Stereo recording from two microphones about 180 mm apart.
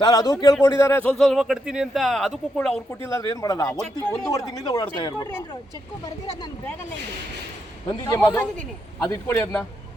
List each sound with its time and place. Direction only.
0.0 s a man's voice: 20° left (ahead or behind)
3.1 s speech: 15° left (ahead or behind)
3.7 s a man's voice: 5° left (ahead or behind)
4.3 s speech: 20° left (ahead or behind)
7.9 s speech: 20° left (ahead or behind)